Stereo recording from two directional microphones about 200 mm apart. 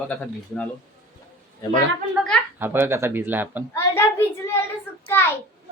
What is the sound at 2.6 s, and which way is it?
Speech, 10° right (ahead or behind).